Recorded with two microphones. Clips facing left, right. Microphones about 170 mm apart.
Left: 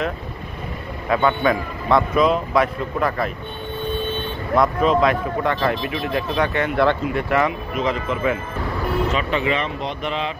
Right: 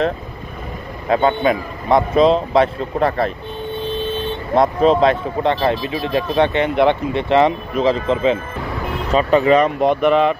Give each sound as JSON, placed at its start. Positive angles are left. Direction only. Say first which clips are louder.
{"t": 1.0, "sound": "a man's voice", "louder": "right 3 dB", "side_deg": -30}
{"t": 4.6, "sound": "a man's voice", "louder": "right 4 dB", "side_deg": -30}
{"t": 9.1, "sound": "speech", "louder": "right 8 dB", "side_deg": -40}